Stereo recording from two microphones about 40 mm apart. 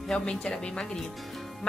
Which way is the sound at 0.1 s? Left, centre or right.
Centre.